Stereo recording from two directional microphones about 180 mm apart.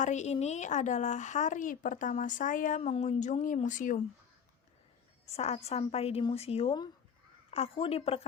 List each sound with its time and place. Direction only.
0.0 s speech: 40° left (ahead or behind)
5.2 s a woman's voice: 35° left (ahead or behind)